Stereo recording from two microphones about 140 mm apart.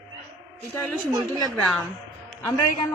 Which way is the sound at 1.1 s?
25° right (ahead or behind).